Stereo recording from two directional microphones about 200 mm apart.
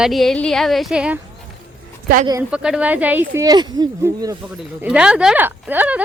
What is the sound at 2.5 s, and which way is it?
Speech, 5° right (ahead or behind).